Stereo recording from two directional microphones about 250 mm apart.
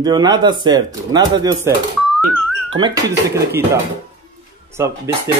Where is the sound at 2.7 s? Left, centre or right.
Centre.